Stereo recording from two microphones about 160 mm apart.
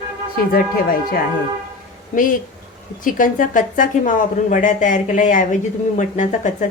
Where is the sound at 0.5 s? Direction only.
70° left (ahead or behind).